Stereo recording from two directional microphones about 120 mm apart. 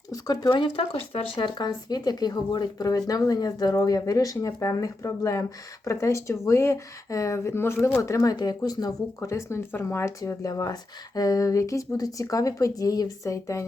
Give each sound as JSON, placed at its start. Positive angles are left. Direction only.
{"t": 0.1, "sound": "speech", "side_deg": 35}